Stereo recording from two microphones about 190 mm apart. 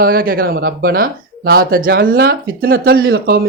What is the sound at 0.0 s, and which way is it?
Speech, 50° right (ahead or behind).